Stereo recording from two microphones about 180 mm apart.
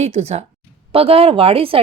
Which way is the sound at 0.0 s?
35° right (ahead or behind).